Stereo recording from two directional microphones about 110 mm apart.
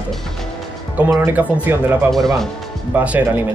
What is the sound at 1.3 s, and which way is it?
Speech, 15° right (ahead or behind).